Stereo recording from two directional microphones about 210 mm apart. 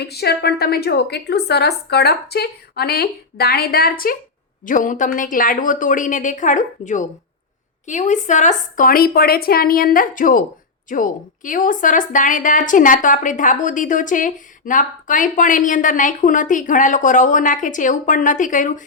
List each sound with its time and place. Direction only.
0.0 s a woman's voice: 50° left (ahead or behind)